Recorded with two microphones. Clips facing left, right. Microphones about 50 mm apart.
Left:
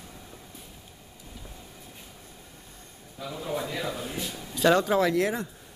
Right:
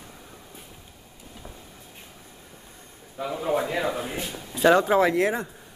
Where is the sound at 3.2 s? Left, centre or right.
Right.